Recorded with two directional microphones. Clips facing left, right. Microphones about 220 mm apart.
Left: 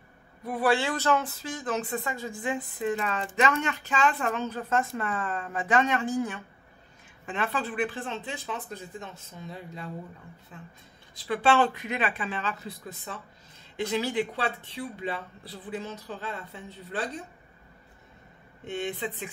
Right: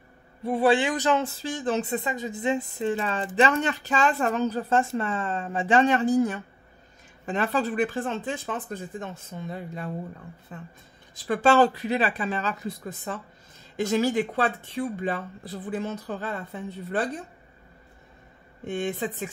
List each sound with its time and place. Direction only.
0.4 s speech: 25° right (ahead or behind); by 17.1 s 50° right (ahead or behind)
18.6 s speech: 50° right (ahead or behind)